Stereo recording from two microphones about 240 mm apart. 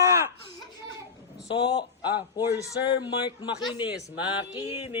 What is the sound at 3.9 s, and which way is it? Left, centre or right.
A man's voice, centre.